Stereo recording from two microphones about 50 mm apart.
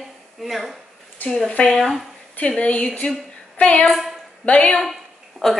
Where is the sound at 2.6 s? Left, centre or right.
Left.